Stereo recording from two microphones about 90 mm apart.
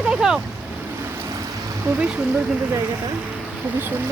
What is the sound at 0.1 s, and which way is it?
Boat, 10° right (ahead or behind).